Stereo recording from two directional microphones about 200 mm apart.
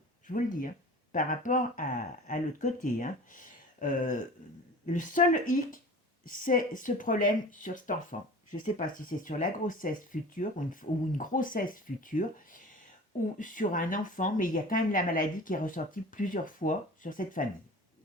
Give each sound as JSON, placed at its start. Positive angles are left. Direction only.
{"t": 0.3, "sound": "speech", "side_deg": 40}